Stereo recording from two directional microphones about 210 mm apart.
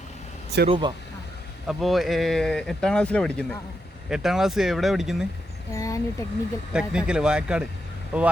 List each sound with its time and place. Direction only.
0.7 s speech: 20° right (ahead or behind)
1.6 s speech: centre (ahead or behind)
5.7 s speech: 15° left (ahead or behind)
6.7 s speech: 5° right (ahead or behind)